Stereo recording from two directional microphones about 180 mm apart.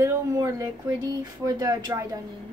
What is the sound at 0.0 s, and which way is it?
Speech, 15° right (ahead or behind).